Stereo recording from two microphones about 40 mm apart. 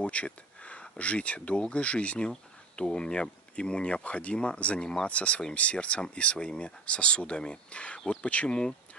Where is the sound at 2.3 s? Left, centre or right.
Centre.